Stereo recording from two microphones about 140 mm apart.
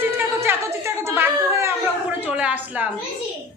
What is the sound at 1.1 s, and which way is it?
A child's voice, 15° right (ahead or behind).